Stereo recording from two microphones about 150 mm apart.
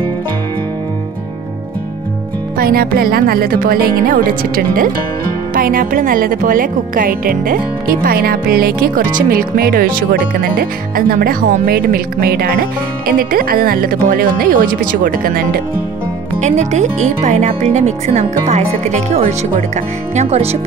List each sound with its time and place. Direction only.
2.5 s speech: 80° right
16.3 s speech: 50° right (ahead or behind)